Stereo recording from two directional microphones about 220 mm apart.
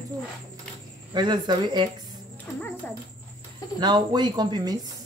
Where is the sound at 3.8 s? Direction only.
20° right (ahead or behind).